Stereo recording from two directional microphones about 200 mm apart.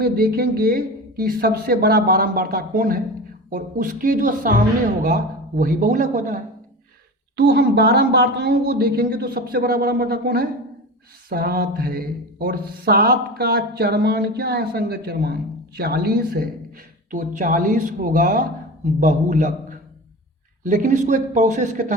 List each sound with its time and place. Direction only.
0.0 s speech: 50° right (ahead or behind)
7.3 s speech: 55° right (ahead or behind); by 19.5 s 40° right (ahead or behind)
20.7 s speech: 40° right (ahead or behind)